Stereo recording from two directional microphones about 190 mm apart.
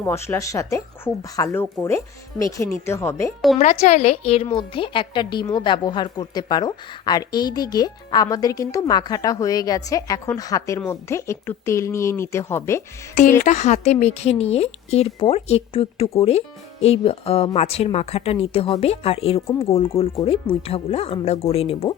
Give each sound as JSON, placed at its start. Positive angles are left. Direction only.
{"t": 0.0, "sound": "speech", "side_deg": 15}
{"t": 3.6, "sound": "a woman's voice", "side_deg": 40}
{"t": 13.4, "sound": "a woman's voice", "side_deg": 40}